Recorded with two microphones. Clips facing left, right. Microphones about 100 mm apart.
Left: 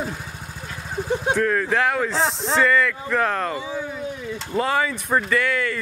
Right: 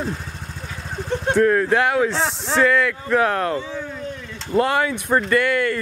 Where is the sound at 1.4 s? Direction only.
10° right (ahead or behind).